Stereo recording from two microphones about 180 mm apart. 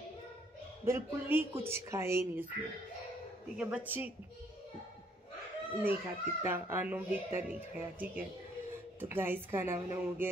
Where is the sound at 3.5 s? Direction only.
10° right (ahead or behind).